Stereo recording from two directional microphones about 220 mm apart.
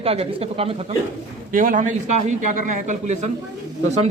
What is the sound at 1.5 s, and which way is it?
A man's voice, 40° right (ahead or behind).